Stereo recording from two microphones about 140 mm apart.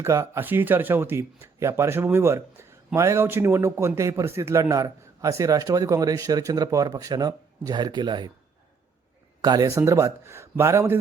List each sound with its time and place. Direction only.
0.0 s speech: 20° right (ahead or behind)
9.4 s speech: 25° right (ahead or behind)